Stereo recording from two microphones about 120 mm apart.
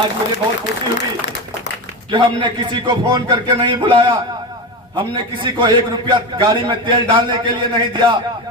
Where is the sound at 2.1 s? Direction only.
45° right (ahead or behind).